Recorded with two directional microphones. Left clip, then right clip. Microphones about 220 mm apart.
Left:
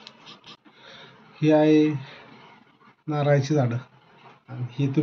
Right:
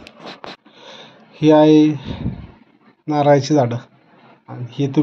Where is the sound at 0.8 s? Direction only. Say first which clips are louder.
Right 6 dB; 25° right (ahead or behind).